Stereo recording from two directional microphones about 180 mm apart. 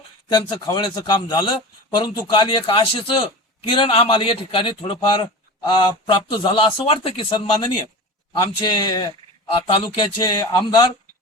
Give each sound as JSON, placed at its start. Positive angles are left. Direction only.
{"t": 0.5, "sound": "a man's voice", "side_deg": 20}